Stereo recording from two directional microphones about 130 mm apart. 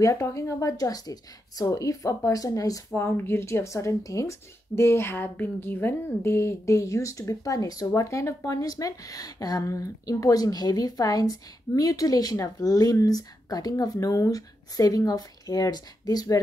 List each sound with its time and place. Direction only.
0.0 s a woman's voice: 25° left (ahead or behind)